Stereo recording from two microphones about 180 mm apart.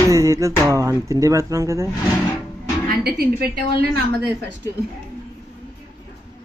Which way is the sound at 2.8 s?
60° right (ahead or behind).